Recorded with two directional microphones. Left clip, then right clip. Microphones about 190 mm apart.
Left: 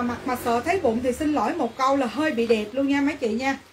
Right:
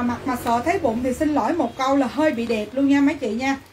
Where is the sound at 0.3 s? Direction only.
30° left (ahead or behind).